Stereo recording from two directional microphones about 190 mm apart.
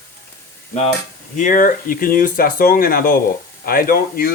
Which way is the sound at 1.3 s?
45° left (ahead or behind).